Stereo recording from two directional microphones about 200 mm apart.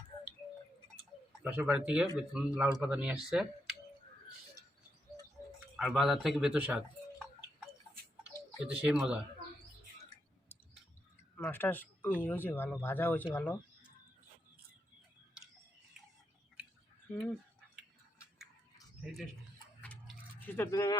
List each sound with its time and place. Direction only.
1.5 s speech: 10° right (ahead or behind)
5.7 s speech: centre (ahead or behind)
8.6 s speech: 5° right (ahead or behind)
11.3 s speech: 10° left (ahead or behind)
19.0 s speech: centre (ahead or behind)
20.4 s speech: 10° left (ahead or behind)